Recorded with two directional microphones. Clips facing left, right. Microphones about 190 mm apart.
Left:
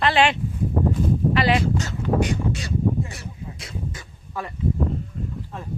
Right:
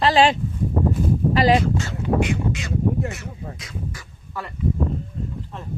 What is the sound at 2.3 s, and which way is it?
Speech, 35° left (ahead or behind).